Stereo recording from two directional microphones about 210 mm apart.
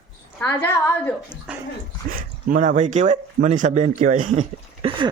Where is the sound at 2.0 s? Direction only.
40° right (ahead or behind).